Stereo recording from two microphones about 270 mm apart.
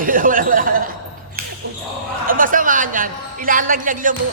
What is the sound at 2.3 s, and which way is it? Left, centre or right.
A woman's voice, right.